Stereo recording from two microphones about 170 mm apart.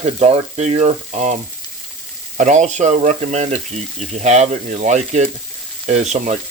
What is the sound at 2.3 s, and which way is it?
Frying, 45° right (ahead or behind).